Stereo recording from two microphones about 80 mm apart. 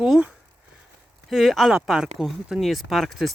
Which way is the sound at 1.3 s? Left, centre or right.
Centre.